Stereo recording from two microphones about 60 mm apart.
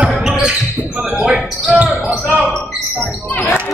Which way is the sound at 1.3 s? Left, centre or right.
Right.